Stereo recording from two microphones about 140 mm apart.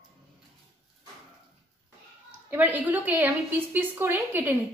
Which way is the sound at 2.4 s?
10° right (ahead or behind).